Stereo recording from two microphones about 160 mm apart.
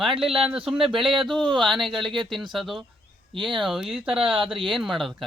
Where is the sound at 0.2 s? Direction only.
Centre (ahead or behind).